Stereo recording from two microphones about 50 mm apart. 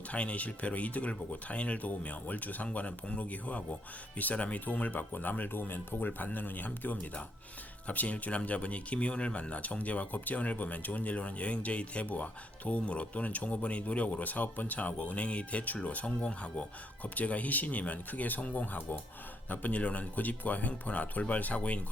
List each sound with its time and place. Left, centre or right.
0.1 s speech: left